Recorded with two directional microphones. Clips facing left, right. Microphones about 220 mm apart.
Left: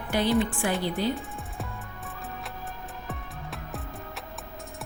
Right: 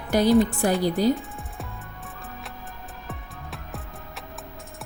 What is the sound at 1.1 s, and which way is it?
Music, centre (ahead or behind).